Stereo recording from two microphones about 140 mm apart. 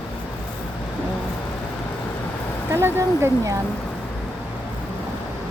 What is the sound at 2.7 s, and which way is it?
Speech, 20° right (ahead or behind).